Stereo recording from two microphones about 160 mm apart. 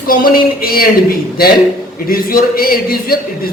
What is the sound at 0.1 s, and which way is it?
A man's voice, 60° left (ahead or behind).